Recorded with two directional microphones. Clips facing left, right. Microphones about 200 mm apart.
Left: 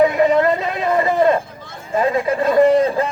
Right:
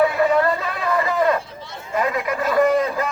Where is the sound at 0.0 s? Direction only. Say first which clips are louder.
Left 3 dB; 20° left (ahead or behind).